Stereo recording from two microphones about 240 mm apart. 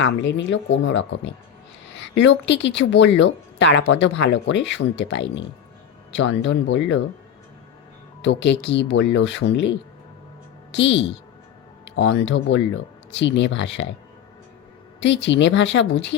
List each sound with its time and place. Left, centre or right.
0.0 s speech: left
8.2 s a woman's voice: left
15.0 s speech: left